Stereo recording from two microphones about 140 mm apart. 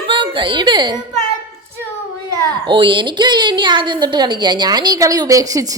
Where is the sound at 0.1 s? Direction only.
35° right (ahead or behind).